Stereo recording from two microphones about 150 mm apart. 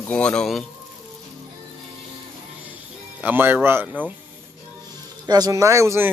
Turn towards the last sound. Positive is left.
turn(degrees=-20)  # may be behind; listen again after turning